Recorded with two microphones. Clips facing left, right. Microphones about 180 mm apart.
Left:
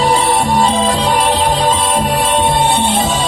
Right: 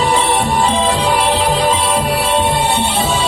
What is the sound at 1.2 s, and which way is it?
Music, 40° left (ahead or behind).